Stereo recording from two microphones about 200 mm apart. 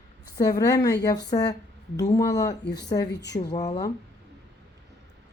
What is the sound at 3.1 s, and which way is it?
Speech, 60° left (ahead or behind).